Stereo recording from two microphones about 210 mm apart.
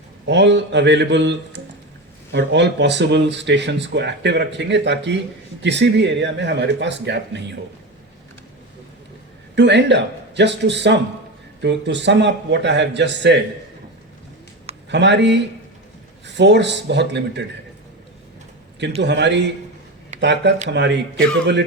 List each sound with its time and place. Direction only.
0.3 s speech: 55° right (ahead or behind)
9.6 s speech: 55° right (ahead or behind)
14.8 s speech: 55° right (ahead or behind)
19.0 s speech: 55° right (ahead or behind)